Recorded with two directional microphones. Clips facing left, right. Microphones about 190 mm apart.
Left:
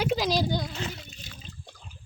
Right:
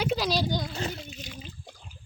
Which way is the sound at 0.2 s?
15° left (ahead or behind).